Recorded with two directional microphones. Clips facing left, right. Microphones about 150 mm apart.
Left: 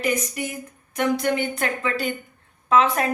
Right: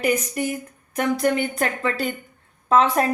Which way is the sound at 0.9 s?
35° right (ahead or behind).